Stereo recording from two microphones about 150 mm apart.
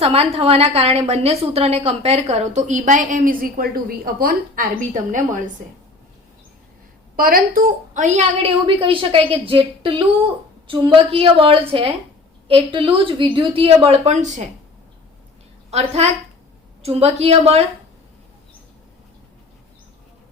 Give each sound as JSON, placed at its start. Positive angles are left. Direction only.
{"t": 0.0, "sound": "a woman's voice", "side_deg": -45}
{"t": 7.2, "sound": "a woman's voice", "side_deg": -75}
{"t": 15.7, "sound": "a woman's voice", "side_deg": -45}